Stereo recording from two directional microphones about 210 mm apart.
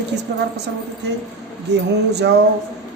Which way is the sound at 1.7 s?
55° right (ahead or behind).